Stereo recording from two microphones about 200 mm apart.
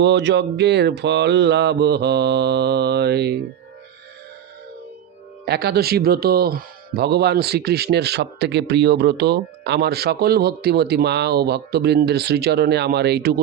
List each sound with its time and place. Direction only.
0.0 s speech: 60° right (ahead or behind)
5.5 s speech: 50° right (ahead or behind)